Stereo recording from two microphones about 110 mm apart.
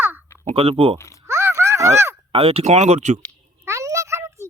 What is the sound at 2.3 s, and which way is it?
Speech, 60° right (ahead or behind).